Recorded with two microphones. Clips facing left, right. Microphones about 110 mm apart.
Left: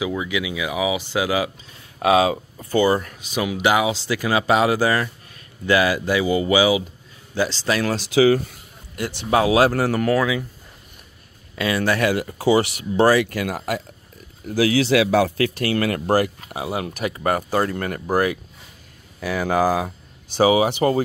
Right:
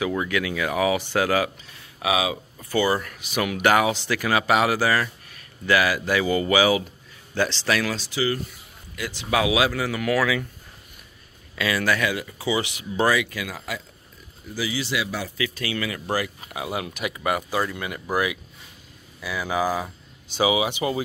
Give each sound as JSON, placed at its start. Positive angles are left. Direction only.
{"t": 0.0, "sound": "speech", "side_deg": 10}
{"t": 2.0, "sound": "speech", "side_deg": 40}
{"t": 7.6, "sound": "speech", "side_deg": 30}
{"t": 8.0, "sound": "speech", "side_deg": 90}
{"t": 8.9, "sound": "speech", "side_deg": 40}
{"t": 10.1, "sound": "speech", "side_deg": 20}
{"t": 11.5, "sound": "speech", "side_deg": 30}
{"t": 12.0, "sound": "speech", "side_deg": 45}
{"t": 14.6, "sound": "speech", "side_deg": 80}
{"t": 15.2, "sound": "speech", "side_deg": 50}
{"t": 16.4, "sound": "speech", "side_deg": 30}
{"t": 20.3, "sound": "speech", "side_deg": 40}